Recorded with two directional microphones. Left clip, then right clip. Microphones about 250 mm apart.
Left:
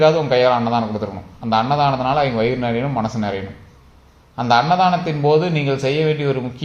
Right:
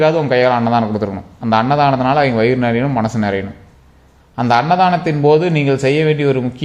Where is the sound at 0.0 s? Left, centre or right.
Right.